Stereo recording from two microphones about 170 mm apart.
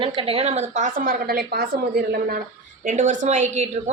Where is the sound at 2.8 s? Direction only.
50° right (ahead or behind).